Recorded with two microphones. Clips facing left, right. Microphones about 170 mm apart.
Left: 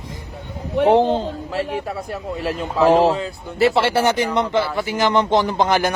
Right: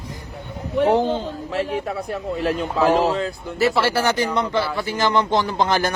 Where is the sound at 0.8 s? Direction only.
30° left (ahead or behind).